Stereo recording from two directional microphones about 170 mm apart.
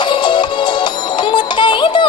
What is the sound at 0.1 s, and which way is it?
Music, 25° left (ahead or behind).